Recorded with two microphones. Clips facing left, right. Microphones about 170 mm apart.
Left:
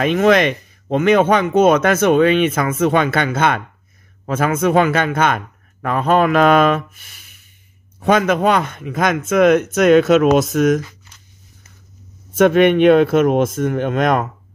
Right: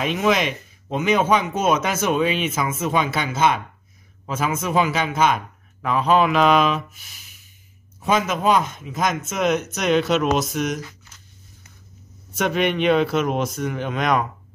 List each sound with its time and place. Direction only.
0.0 s a man's voice: 55° left (ahead or behind)
12.4 s speech: 55° left (ahead or behind)